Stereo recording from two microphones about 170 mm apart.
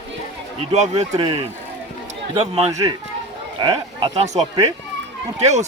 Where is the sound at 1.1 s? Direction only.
30° right (ahead or behind).